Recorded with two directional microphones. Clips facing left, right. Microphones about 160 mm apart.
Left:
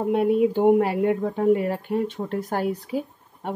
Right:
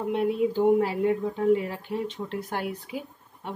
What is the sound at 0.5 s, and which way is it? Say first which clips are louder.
Speech: left 3 dB; 60° left (ahead or behind).